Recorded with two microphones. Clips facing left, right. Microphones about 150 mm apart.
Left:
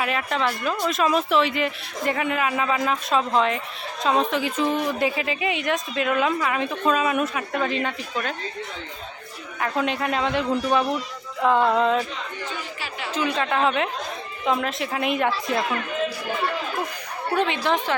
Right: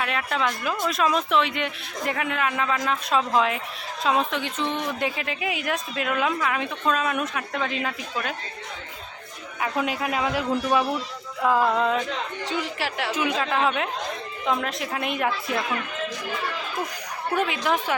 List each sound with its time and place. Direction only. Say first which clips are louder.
0.0 s a woman's voice: left 2 dB; centre (ahead or behind)
9.6 s a woman's voice: left 2 dB; 5° right (ahead or behind)
12.5 s a woman's voice: right 5 dB; 75° right (ahead or behind)
13.1 s a woman's voice: left 3 dB; 10° right (ahead or behind)
17.4 s a woman's voice: left 2 dB; 5° right (ahead or behind)